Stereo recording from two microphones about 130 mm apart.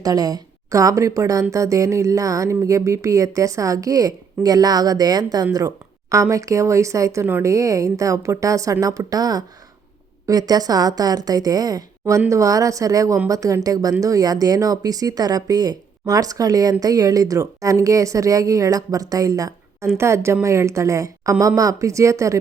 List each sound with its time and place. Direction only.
0.0 s a woman's voice: 30° right (ahead or behind)